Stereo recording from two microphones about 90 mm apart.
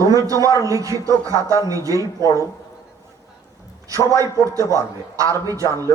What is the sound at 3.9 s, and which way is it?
A man's voice, 35° right (ahead or behind).